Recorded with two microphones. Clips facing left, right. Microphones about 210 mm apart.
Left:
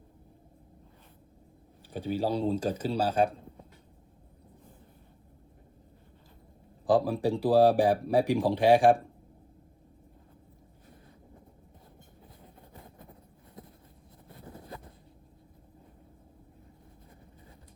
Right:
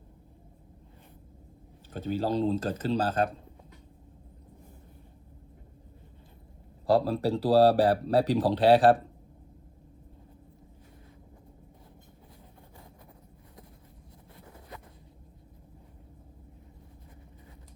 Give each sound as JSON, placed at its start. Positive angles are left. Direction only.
{"t": 1.9, "sound": "speech", "side_deg": 10}
{"t": 6.8, "sound": "speech", "side_deg": 15}
{"t": 14.3, "sound": "boat", "side_deg": 30}